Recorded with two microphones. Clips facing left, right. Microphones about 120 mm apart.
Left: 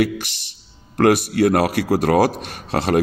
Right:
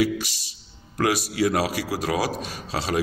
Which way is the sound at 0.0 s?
60° left (ahead or behind).